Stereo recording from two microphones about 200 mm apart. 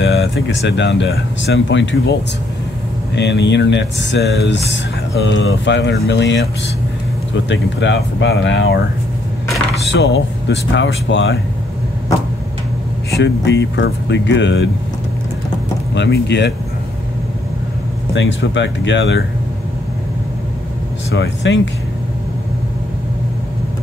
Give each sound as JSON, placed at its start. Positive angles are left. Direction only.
{"t": 0.0, "sound": "speech", "side_deg": 65}
{"t": 3.2, "sound": "speech", "side_deg": 60}
{"t": 7.4, "sound": "speech", "side_deg": 65}
{"t": 9.8, "sound": "speech", "side_deg": 60}
{"t": 13.2, "sound": "speech", "side_deg": 60}
{"t": 15.9, "sound": "speech", "side_deg": 60}
{"t": 18.1, "sound": "speech", "side_deg": 65}
{"t": 21.1, "sound": "speech", "side_deg": 60}